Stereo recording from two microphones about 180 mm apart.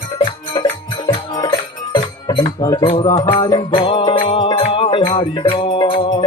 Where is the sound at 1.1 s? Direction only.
25° left (ahead or behind).